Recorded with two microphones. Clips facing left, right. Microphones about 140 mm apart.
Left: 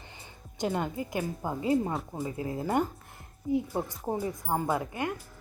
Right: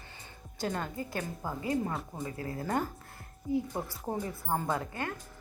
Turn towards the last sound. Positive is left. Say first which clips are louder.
# left 3 dB
turn(degrees=15)  # may be behind; listen again after turning